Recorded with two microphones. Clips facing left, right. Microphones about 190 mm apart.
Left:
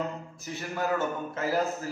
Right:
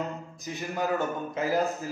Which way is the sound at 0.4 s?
15° right (ahead or behind).